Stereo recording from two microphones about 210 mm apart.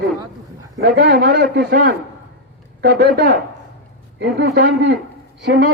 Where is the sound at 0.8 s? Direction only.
50° right (ahead or behind).